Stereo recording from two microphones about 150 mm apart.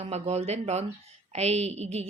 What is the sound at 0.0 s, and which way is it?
Speech, 45° right (ahead or behind).